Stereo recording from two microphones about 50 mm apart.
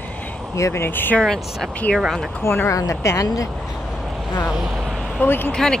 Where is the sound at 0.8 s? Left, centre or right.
Left.